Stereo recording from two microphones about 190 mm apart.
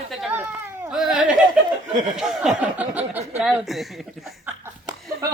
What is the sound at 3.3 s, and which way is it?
Speech, 5° right (ahead or behind).